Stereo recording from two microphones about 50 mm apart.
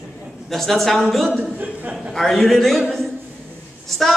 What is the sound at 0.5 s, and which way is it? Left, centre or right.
Speech, centre.